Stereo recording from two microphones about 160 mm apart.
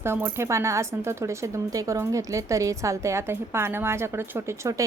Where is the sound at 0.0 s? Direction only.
15° right (ahead or behind).